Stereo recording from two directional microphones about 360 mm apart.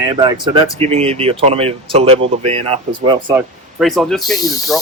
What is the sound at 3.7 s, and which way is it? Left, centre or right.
Speech, centre.